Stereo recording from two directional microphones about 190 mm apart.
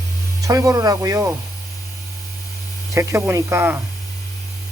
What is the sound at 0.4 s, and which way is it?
Speech, 15° right (ahead or behind).